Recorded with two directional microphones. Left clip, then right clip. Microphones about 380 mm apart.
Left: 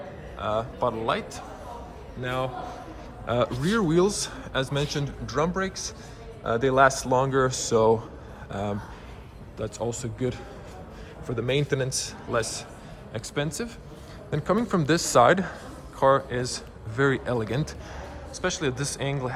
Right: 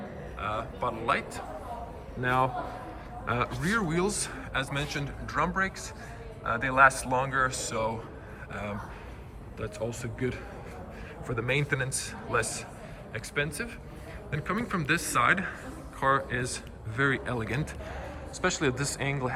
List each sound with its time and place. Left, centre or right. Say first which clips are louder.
0.3 s a man's voice: left 6 dB; centre